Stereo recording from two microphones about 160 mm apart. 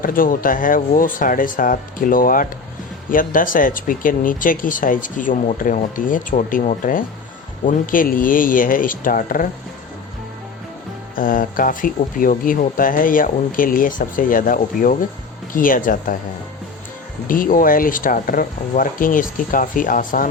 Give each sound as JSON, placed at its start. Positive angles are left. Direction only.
{"t": 0.0, "sound": "speech", "side_deg": 60}
{"t": 11.1, "sound": "speech", "side_deg": 60}
{"t": 17.2, "sound": "speech", "side_deg": 60}